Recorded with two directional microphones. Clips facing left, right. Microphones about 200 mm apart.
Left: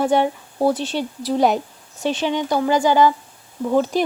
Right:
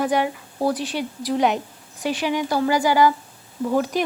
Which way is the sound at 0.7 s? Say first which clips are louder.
Left 2 dB; 25° left (ahead or behind).